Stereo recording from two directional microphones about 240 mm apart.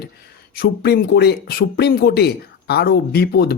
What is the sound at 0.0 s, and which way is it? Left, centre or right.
Speech, left.